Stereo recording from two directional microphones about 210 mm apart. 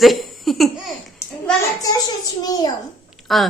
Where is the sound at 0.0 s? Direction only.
Centre (ahead or behind).